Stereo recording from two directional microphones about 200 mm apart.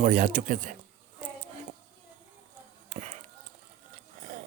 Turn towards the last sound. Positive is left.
turn(degrees=-35)  # may be behind; listen again after turning